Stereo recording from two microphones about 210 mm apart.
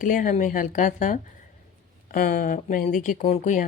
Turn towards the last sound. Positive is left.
turn(degrees=35)  # may be behind; listen again after turning